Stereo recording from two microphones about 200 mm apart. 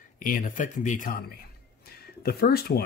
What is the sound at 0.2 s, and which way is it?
Speech, 45° left (ahead or behind).